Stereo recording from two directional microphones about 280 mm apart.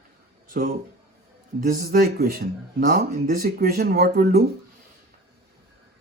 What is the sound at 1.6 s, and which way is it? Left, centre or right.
Speech, right.